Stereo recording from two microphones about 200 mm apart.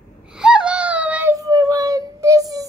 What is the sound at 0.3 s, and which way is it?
Baby cry, 5° right (ahead or behind).